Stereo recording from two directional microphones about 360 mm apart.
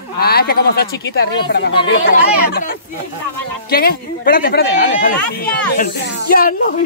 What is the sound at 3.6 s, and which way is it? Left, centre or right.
Speech, left.